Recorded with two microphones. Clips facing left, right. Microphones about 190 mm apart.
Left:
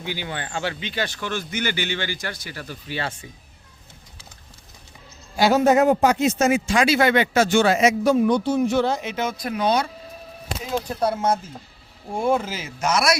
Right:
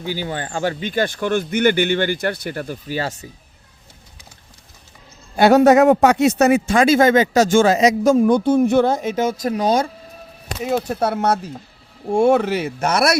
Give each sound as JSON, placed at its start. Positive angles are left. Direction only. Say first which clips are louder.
{"t": 0.0, "sound": "speech", "louder": "right 5 dB", "side_deg": -40}
{"t": 5.4, "sound": "speech", "louder": "right 5 dB", "side_deg": -65}
{"t": 10.6, "sound": "speech", "louder": "right 4 dB", "side_deg": -70}